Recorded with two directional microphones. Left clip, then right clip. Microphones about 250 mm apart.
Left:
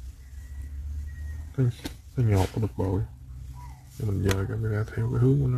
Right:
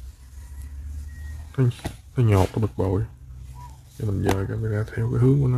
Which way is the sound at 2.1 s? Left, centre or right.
Right.